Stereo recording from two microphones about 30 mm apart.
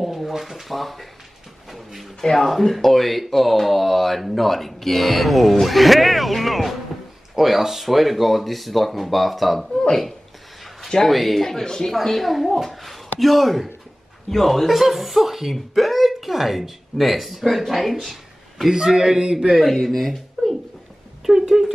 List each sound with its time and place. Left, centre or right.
0.0 s a sound: centre
0.3 s speech: centre
2.3 s speech: centre
11.1 s speech: centre
11.4 s a man's voice: centre
11.9 s a man's voice: centre
14.7 s speech: centre
18.7 s a man's voice: right
19.9 s speech: centre
21.3 s a sound: centre